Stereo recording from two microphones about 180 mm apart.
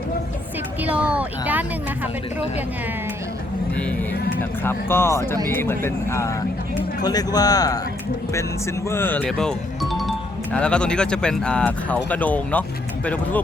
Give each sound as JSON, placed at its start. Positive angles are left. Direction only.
{"t": 0.9, "sound": "speech", "side_deg": -5}
{"t": 4.6, "sound": "speech", "side_deg": 15}
{"t": 8.9, "sound": "speech", "side_deg": 10}